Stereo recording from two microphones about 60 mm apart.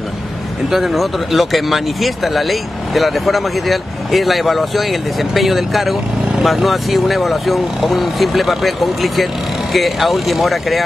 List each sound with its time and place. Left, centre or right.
0.7 s speech: centre